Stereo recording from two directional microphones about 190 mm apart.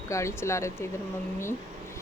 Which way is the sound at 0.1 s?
15° left (ahead or behind).